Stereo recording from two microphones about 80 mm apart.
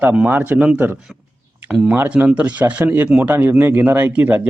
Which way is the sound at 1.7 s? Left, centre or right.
Centre.